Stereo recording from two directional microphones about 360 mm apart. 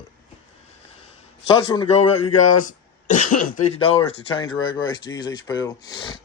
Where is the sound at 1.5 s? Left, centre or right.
Centre.